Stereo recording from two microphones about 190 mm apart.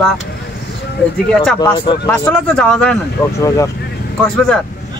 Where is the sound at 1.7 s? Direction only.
25° left (ahead or behind).